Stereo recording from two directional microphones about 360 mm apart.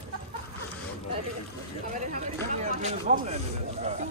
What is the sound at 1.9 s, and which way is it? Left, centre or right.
Speech, right.